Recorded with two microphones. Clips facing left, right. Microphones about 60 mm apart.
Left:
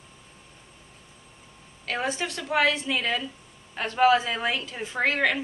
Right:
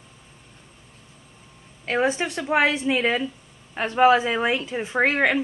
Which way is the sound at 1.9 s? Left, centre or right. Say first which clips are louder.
Right 6 dB; right.